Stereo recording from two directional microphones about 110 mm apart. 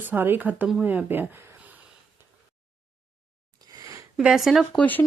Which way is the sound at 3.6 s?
30° right (ahead or behind).